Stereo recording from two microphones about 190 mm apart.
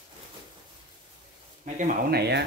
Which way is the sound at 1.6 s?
40° right (ahead or behind).